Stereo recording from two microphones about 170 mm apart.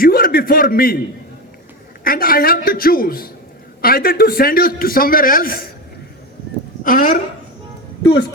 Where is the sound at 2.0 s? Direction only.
60° left (ahead or behind).